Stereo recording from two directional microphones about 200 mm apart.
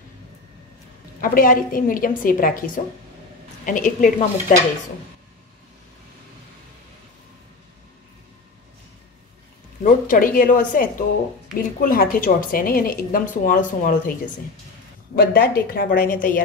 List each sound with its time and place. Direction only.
1.2 s speech: 45° left (ahead or behind)
9.8 s speech: 45° left (ahead or behind)
15.1 s speech: 50° left (ahead or behind)